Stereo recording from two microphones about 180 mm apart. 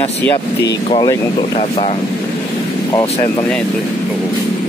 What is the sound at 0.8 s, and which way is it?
Speech, 25° left (ahead or behind).